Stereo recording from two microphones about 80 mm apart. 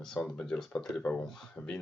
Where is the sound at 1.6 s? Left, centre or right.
Left.